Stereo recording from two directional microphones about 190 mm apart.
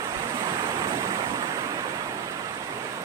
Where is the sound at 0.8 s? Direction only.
20° right (ahead or behind).